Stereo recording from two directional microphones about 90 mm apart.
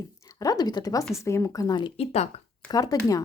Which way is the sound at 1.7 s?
60° left (ahead or behind).